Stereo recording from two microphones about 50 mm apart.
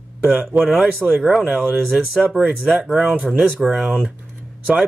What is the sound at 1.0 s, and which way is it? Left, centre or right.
Speech, centre.